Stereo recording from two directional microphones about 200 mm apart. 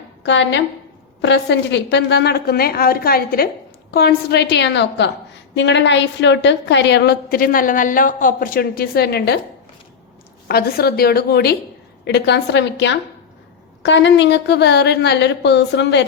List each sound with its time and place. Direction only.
0.2 s a woman's voice: 65° left (ahead or behind)
10.5 s a woman's voice: 50° left (ahead or behind)